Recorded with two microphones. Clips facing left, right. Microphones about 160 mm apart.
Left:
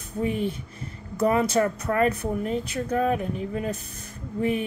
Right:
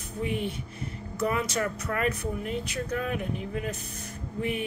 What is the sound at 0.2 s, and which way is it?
Speech, 40° left (ahead or behind).